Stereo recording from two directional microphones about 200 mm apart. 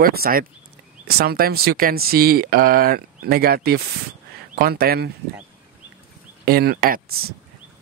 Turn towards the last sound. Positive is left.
turn(degrees=-50)  # may be behind; listen again after turning